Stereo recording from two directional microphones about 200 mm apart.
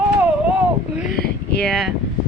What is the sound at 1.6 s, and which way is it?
Female singing, centre (ahead or behind).